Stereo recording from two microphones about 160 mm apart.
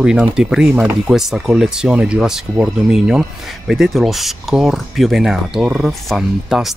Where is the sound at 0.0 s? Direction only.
5° right (ahead or behind).